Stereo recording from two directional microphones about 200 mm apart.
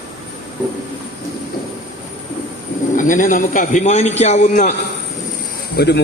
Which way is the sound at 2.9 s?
40° left (ahead or behind).